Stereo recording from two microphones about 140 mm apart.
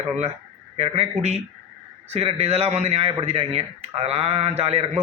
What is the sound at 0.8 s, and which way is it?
Speech, 50° right (ahead or behind).